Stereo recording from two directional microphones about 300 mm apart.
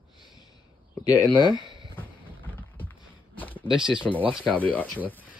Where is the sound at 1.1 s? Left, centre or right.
Centre.